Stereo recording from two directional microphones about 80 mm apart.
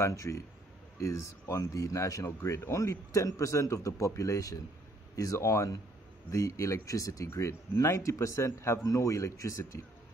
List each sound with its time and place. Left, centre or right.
0.0 s a man's voice: left
2.2 s a man's voice: left